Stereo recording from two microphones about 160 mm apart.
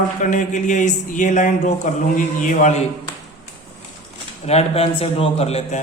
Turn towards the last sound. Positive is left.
turn(degrees=45)  # may be behind; listen again after turning